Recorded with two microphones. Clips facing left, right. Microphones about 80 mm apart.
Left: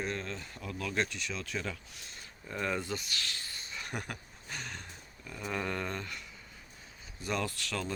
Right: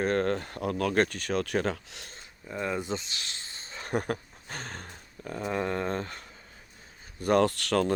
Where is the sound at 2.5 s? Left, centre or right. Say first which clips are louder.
Right 3 dB; centre.